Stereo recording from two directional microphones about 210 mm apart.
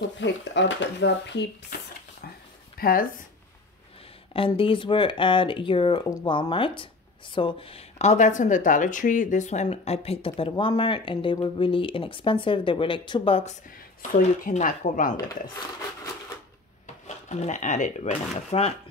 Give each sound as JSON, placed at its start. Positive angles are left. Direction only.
{"t": 0.2, "sound": "speech", "side_deg": 60}
{"t": 2.8, "sound": "speech", "side_deg": 45}
{"t": 4.3, "sound": "speech", "side_deg": 25}
{"t": 14.1, "sound": "speech", "side_deg": 40}
{"t": 16.8, "sound": "drawer open or close", "side_deg": 35}
{"t": 18.5, "sound": "speech", "side_deg": 30}